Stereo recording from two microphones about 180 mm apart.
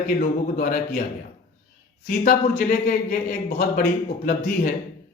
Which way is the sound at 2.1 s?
50° left (ahead or behind).